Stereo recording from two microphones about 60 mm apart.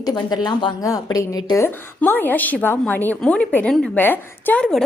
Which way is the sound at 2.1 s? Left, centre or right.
Left.